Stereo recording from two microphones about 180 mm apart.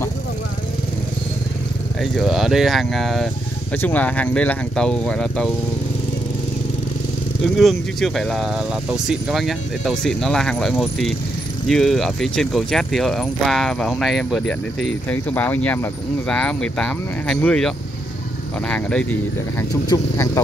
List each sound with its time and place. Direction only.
2.0 s speech: centre (ahead or behind)
7.5 s speech: centre (ahead or behind)
19.9 s speech: 15° left (ahead or behind)